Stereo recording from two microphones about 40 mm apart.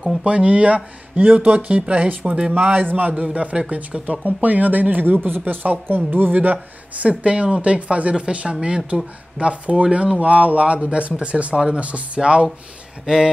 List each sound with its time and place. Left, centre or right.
0.2 s speech: right
2.8 s speech: right
3.1 s speech: right
4.4 s speech: right
6.3 s speech: right
9.8 s speech: right
10.2 s speech: right
13.0 s speech: centre